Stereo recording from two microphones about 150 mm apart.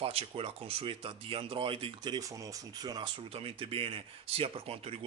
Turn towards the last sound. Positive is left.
turn(degrees=-40)  # may be behind; listen again after turning